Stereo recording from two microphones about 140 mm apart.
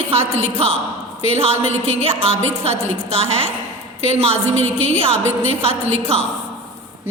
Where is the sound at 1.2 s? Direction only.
50° right (ahead or behind).